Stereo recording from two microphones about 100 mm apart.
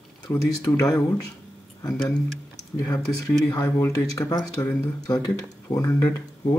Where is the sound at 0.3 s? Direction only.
35° left (ahead or behind).